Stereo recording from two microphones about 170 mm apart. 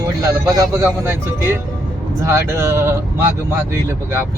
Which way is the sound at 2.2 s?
15° right (ahead or behind).